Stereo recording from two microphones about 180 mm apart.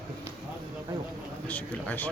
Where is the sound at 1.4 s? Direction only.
10° left (ahead or behind).